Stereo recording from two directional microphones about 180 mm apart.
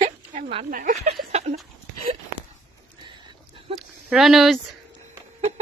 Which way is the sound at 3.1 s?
25° right (ahead or behind).